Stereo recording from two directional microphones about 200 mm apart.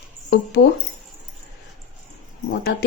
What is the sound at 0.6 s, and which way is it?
Speech, 55° left (ahead or behind).